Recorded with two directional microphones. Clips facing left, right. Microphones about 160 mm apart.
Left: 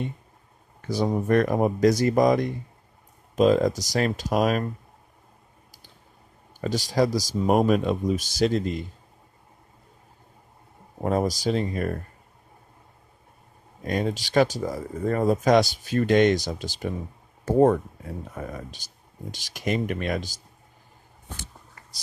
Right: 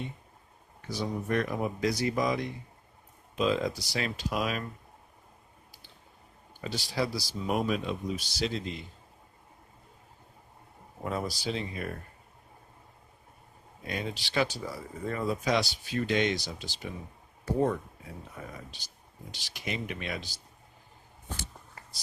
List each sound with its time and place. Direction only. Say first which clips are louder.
0.8 s speech: left 9 dB; 45° left (ahead or behind)
6.5 s speech: left 9 dB; 45° left (ahead or behind)
11.0 s speech: left 9 dB; 45° left (ahead or behind)
13.8 s speech: left 9 dB; 45° left (ahead or behind)